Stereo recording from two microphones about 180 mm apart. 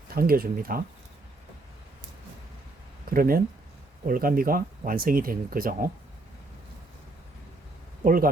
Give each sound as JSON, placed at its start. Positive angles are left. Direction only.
{"t": 0.1, "sound": "speech", "side_deg": -55}
{"t": 3.1, "sound": "speech", "side_deg": -55}
{"t": 8.0, "sound": "speech", "side_deg": -50}